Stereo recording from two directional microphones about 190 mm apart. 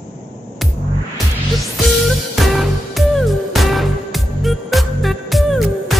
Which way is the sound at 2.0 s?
Centre (ahead or behind).